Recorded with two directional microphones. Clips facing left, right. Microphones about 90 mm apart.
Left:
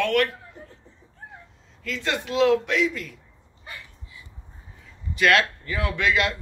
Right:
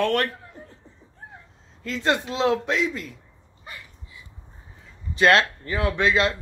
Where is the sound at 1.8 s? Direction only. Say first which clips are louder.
Right 4 dB; 30° right (ahead or behind).